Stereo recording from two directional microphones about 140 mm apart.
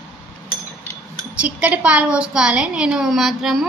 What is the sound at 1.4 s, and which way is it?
Speech, 10° right (ahead or behind).